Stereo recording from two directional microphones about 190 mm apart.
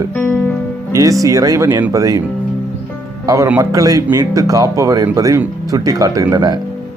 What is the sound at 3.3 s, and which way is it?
Speech, 15° right (ahead or behind).